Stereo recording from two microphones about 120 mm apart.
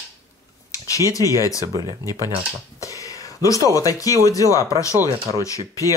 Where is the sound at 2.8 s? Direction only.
25° left (ahead or behind).